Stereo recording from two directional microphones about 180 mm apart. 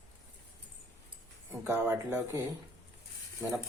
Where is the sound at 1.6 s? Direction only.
10° right (ahead or behind).